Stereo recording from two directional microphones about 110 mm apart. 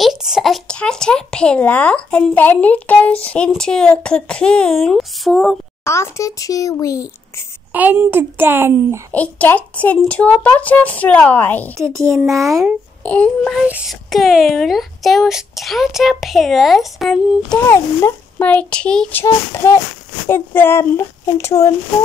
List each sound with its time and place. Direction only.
0.0 s a woman's voice: 5° right (ahead or behind)
5.9 s speech: 25° left (ahead or behind)
7.7 s speech: 15° right (ahead or behind)
9.1 s a woman's voice: 15° left (ahead or behind)
11.7 s speech: 25° right (ahead or behind)
13.0 s a woman's voice: 10° left (ahead or behind)
13.8 s speech: centre (ahead or behind)
17.6 s a woman's voice: 20° left (ahead or behind)
19.2 s speech: 25° left (ahead or behind)